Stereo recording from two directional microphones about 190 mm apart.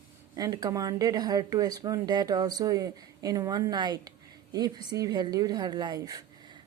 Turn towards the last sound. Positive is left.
turn(degrees=-20)  # may be behind; listen again after turning